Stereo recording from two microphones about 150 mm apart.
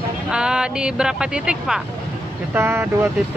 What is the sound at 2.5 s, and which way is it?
Speech, 15° right (ahead or behind).